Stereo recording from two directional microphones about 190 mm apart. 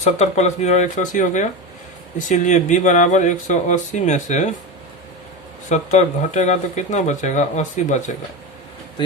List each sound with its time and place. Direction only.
0.0 s speech: 35° left (ahead or behind)
5.6 s speech: 40° left (ahead or behind)